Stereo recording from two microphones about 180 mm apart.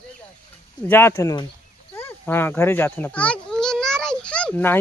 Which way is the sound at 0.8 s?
10° left (ahead or behind).